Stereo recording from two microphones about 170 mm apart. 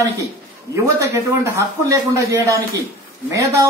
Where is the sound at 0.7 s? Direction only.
15° right (ahead or behind).